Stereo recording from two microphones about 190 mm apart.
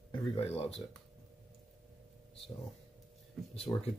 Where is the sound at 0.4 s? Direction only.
30° left (ahead or behind).